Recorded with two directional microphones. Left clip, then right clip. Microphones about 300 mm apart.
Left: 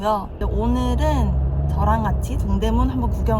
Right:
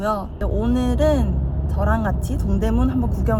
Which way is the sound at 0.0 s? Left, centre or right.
Right.